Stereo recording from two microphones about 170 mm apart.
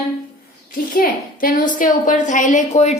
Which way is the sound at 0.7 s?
60° left (ahead or behind).